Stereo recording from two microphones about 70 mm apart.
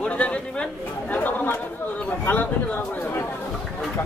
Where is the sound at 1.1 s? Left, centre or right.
Left.